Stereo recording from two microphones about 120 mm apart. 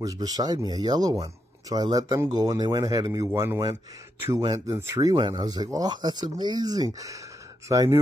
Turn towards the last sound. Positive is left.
turn(degrees=-25)  # may be behind; listen again after turning